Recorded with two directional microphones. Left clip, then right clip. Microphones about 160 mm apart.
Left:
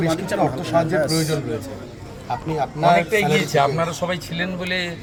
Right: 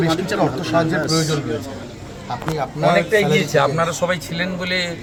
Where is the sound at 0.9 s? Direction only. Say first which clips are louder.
Even; 50° left (ahead or behind).